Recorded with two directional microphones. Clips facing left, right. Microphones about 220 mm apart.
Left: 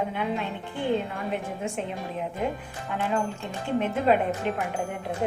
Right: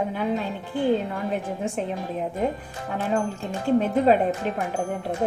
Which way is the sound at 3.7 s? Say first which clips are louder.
Right 6 dB; 40° right (ahead or behind).